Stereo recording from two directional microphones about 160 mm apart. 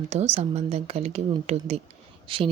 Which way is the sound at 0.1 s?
45° right (ahead or behind).